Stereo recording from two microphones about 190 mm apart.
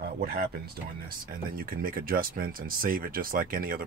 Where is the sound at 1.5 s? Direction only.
50° right (ahead or behind).